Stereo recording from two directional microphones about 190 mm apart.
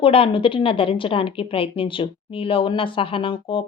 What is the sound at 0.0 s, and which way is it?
A woman's voice, 30° left (ahead or behind).